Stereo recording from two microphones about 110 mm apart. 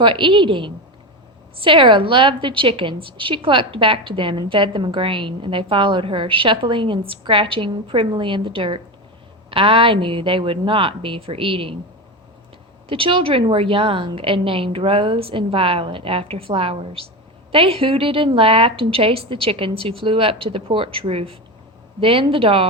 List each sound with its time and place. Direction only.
0.0 s a woman's voice: 50° right (ahead or behind)
12.9 s a woman's voice: 55° right (ahead or behind)